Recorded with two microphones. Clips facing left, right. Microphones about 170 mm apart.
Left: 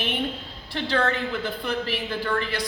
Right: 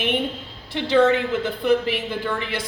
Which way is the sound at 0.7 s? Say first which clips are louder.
Right 7 dB; 20° right (ahead or behind).